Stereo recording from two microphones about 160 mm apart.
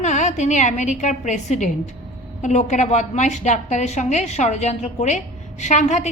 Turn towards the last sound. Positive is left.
turn(degrees=45)  # may be behind; listen again after turning